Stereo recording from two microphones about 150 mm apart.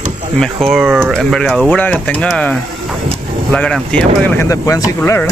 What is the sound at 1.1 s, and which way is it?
Speech, 5° left (ahead or behind).